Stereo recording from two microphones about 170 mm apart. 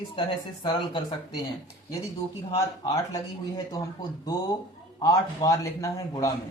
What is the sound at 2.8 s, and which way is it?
Speech, 20° left (ahead or behind).